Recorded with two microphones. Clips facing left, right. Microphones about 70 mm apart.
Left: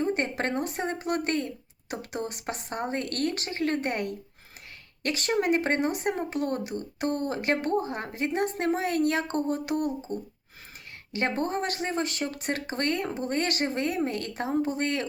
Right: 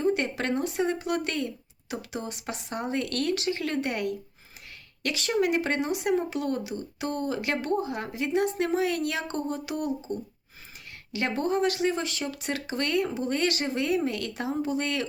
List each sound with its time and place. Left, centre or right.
0.0 s speech: left